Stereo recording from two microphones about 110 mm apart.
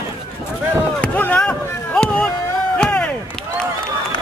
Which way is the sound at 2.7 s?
10° left (ahead or behind).